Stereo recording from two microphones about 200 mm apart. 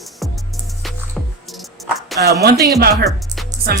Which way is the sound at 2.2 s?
55° right (ahead or behind).